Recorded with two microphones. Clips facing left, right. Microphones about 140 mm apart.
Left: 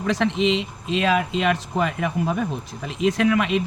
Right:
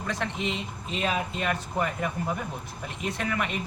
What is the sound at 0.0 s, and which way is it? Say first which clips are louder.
Speech: left 10 dB; 90° left.